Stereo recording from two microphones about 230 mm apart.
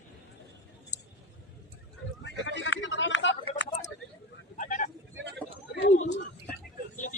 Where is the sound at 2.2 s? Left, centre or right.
Left.